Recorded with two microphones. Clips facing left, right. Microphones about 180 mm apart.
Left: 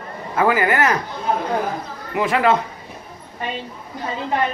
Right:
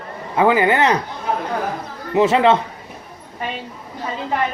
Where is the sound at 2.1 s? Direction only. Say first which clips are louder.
Right 4 dB; 25° right (ahead or behind).